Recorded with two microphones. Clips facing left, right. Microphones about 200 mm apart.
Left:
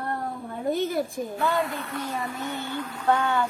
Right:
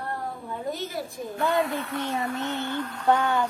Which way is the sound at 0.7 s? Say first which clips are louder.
Left 8 dB; 55° left (ahead or behind).